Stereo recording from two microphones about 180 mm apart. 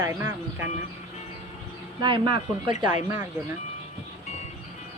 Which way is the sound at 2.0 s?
25° right (ahead or behind).